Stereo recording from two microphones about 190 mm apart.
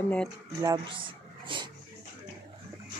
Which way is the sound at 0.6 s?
20° right (ahead or behind).